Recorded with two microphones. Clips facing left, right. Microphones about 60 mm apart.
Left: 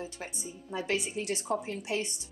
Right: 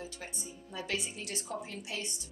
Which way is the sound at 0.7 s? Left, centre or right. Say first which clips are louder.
Left 5 dB; left.